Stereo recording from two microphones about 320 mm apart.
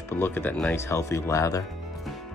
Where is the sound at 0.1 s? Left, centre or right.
Centre.